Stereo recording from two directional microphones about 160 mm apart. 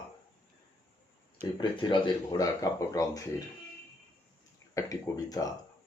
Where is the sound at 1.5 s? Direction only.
30° left (ahead or behind).